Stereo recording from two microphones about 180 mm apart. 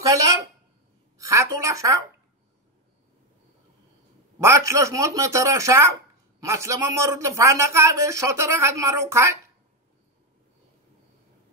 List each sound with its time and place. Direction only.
0.0 s a woman's voice: 20° right (ahead or behind)
4.4 s speech: 15° right (ahead or behind)